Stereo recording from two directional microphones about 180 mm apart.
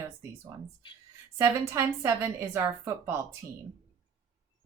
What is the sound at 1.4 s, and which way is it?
Speech, 15° right (ahead or behind).